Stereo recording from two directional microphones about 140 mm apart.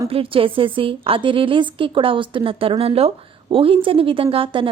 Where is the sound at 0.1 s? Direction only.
40° right (ahead or behind).